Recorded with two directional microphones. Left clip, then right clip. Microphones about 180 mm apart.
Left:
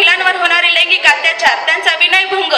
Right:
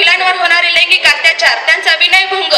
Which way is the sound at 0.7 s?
20° right (ahead or behind).